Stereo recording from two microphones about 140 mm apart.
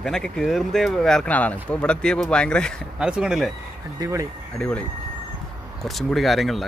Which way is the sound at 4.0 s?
25° right (ahead or behind).